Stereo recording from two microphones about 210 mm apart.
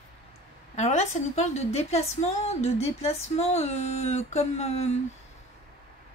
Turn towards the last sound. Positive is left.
turn(degrees=30)  # may be behind; listen again after turning